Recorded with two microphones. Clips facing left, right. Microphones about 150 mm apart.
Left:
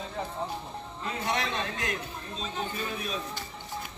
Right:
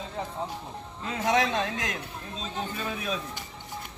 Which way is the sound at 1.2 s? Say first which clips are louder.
Right 7 dB; 90° right.